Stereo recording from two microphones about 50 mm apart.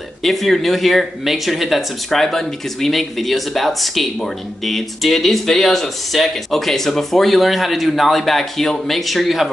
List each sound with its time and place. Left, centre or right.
0.2 s speech: centre